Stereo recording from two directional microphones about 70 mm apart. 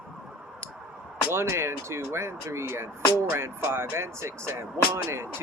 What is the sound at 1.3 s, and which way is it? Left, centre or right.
Speech, right.